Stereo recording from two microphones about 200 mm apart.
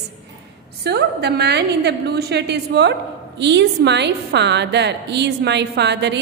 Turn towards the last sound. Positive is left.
turn(degrees=-60)  # may be behind; listen again after turning